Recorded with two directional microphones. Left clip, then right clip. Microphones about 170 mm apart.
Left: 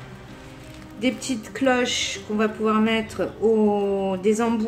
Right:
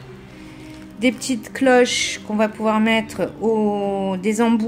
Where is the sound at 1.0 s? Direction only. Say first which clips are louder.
Right 5 dB; 60° right (ahead or behind).